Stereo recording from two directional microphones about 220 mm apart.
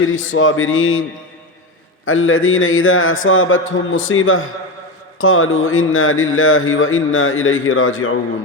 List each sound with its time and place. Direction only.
0.2 s speech: 60° left (ahead or behind)
2.0 s speech: 65° left (ahead or behind)